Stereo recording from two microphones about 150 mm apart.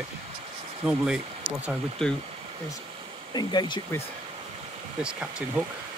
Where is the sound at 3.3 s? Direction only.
30° left (ahead or behind).